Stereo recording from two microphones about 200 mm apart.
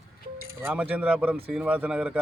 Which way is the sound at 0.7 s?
10° right (ahead or behind).